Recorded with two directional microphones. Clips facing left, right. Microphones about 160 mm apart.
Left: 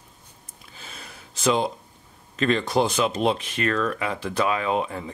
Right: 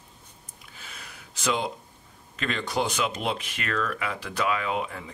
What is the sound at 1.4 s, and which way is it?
Speech, 30° left (ahead or behind).